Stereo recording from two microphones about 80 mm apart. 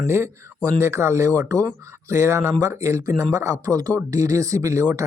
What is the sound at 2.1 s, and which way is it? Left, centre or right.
Speech, right.